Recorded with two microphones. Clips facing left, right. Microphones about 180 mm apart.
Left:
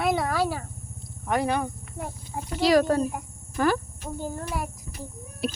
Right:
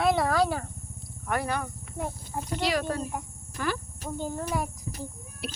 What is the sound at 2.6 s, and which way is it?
Speech, 40° left (ahead or behind).